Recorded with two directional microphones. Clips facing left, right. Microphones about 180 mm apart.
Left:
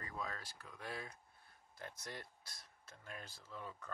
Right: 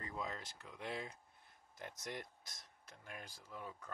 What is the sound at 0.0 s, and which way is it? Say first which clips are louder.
Speech: right 1 dB; 20° right (ahead or behind).